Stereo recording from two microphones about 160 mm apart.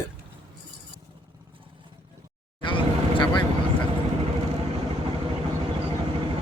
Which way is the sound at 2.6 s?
30° left (ahead or behind).